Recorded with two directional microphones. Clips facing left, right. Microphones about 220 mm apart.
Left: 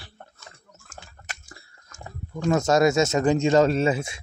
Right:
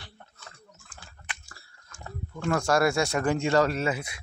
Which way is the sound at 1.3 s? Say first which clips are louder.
Right 1 dB; 40° left (ahead or behind).